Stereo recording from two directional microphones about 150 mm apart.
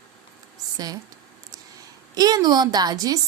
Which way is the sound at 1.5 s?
25° right (ahead or behind).